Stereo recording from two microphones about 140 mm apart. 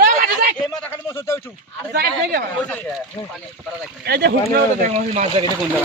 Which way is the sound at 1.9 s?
90° right.